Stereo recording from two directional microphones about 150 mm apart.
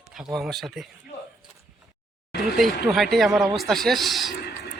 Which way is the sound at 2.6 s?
Centre (ahead or behind).